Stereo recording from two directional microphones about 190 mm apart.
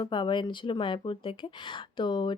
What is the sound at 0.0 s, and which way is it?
Speech, 25° left (ahead or behind).